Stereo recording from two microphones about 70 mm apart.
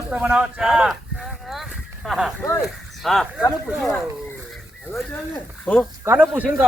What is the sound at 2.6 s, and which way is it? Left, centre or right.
Speech, centre.